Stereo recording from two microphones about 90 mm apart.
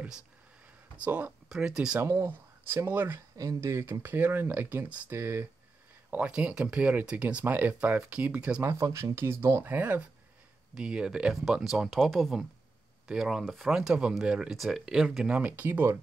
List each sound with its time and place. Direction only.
0.9 s speech: 15° right (ahead or behind)
1.5 s speech: 5° right (ahead or behind)
2.0 s speech: 30° right (ahead or behind)
3.3 s speech: 35° right (ahead or behind); by 5.1 s 15° right (ahead or behind)
5.1 s speech: 25° right (ahead or behind)
6.0 s speech: 15° right (ahead or behind)
8.8 s speech: 35° right (ahead or behind)
10.7 s speech: 10° right (ahead or behind)